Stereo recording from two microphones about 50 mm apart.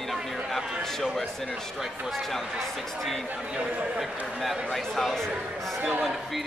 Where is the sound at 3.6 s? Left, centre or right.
Right.